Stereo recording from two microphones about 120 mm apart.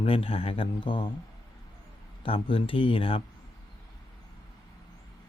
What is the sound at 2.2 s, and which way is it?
Speech, 50° left (ahead or behind).